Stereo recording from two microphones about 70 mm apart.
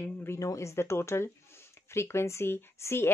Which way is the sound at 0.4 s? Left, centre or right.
Left.